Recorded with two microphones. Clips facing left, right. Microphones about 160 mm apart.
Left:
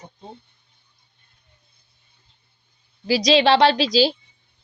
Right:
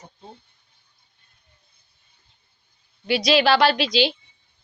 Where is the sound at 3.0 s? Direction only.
30° left (ahead or behind).